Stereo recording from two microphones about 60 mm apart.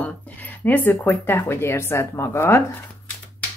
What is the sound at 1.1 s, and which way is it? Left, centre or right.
Speech, left.